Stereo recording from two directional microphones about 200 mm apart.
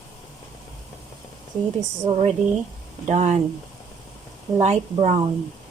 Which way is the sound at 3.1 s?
35° right (ahead or behind).